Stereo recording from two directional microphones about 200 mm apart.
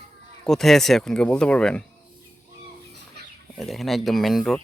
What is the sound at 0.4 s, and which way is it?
Speech, centre (ahead or behind).